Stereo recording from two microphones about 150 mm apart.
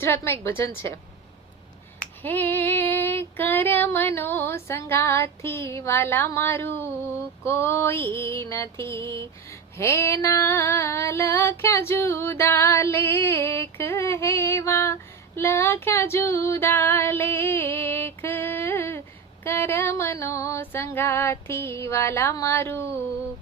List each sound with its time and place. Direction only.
0.0 s female singing: 15° left (ahead or behind)
2.2 s female singing: 10° left (ahead or behind)